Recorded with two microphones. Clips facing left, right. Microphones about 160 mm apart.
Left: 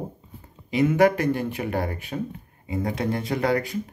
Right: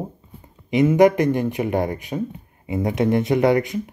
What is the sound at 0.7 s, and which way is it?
Speech, 20° right (ahead or behind).